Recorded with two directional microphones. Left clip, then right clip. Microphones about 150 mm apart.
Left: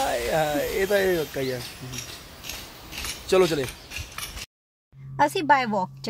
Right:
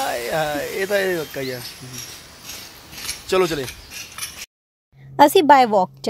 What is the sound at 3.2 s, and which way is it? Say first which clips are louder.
Speech: right 1 dB; 20° right (ahead or behind).